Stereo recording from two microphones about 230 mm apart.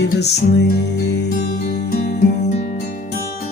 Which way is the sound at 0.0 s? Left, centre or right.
Left.